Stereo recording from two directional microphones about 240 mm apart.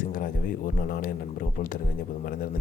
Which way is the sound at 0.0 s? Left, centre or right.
Left.